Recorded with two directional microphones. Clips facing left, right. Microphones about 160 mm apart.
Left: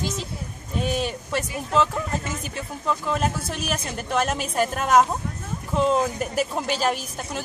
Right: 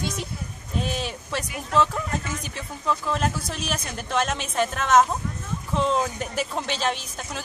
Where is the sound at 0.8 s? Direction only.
Centre (ahead or behind).